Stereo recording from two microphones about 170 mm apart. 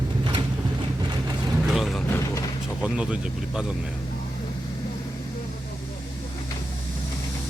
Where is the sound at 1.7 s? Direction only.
Centre (ahead or behind).